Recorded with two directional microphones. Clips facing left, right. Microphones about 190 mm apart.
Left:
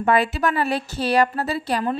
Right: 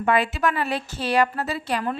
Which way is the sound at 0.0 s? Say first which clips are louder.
Left 2 dB; 35° left (ahead or behind).